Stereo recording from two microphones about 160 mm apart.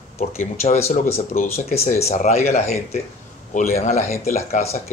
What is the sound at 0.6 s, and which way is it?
Speech, 40° left (ahead or behind).